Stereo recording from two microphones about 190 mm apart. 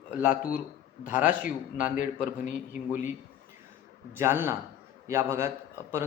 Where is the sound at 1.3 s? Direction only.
45° left (ahead or behind).